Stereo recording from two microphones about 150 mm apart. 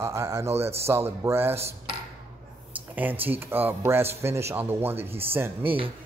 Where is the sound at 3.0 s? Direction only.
15° right (ahead or behind).